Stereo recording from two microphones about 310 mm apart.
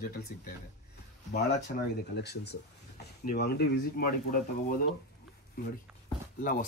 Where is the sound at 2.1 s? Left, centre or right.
Left.